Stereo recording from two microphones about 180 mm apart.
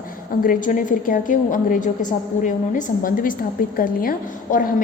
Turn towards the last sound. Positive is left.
turn(degrees=50)  # may be behind; listen again after turning